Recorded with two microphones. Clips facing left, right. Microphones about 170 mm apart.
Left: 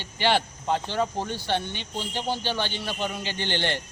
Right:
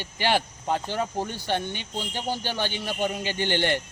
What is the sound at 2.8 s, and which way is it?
Speech, 45° right (ahead or behind).